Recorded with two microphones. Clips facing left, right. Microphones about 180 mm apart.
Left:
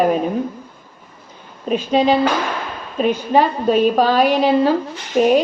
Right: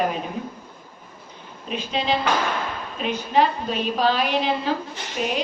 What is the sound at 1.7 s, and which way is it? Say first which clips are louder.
A woman's voice: left 9 dB; 45° left (ahead or behind).